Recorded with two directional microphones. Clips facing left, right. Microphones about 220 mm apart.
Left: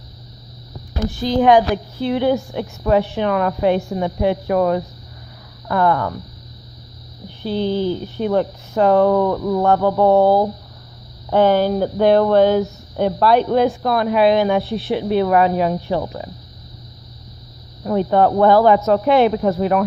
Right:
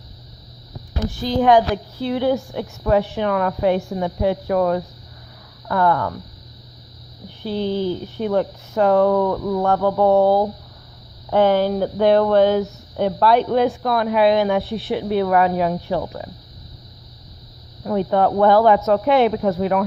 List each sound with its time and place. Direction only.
1.4 s a woman's voice: 15° left (ahead or behind)
7.4 s a woman's voice: 30° left (ahead or behind)
17.8 s speech: 35° left (ahead or behind)